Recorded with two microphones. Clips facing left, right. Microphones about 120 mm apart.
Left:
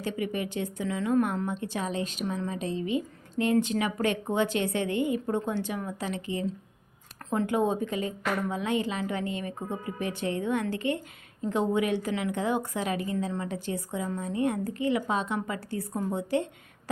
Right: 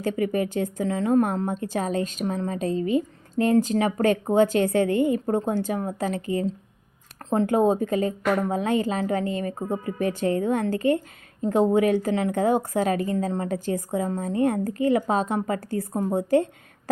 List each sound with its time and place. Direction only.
0.0 s a woman's voice: 45° right (ahead or behind)